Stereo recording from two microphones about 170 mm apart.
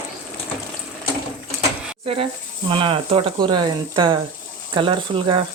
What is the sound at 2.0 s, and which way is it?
Speech, 35° right (ahead or behind).